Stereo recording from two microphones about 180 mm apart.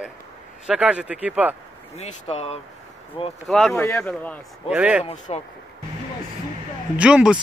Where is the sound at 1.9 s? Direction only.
35° left (ahead or behind).